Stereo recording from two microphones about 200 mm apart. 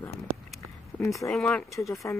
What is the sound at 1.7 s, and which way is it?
Speech, 15° left (ahead or behind).